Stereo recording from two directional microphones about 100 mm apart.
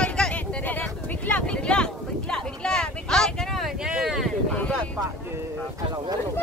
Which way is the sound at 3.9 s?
5° right (ahead or behind).